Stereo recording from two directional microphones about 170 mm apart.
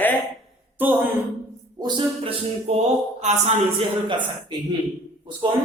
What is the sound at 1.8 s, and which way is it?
Speech, 25° right (ahead or behind).